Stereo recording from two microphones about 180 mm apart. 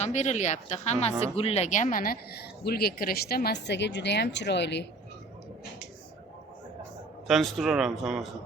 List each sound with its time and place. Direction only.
0.0 s a woman's voice: 40° left (ahead or behind); by 4.9 s 75° left (ahead or behind)
7.3 s speech: centre (ahead or behind)